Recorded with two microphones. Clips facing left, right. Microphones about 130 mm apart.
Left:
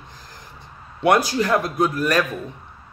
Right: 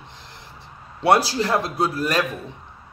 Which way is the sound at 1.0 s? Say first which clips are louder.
Even; 30° right (ahead or behind).